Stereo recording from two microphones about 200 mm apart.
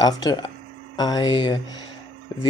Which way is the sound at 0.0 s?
20° left (ahead or behind).